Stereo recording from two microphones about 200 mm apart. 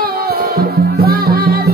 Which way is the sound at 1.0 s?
50° right (ahead or behind).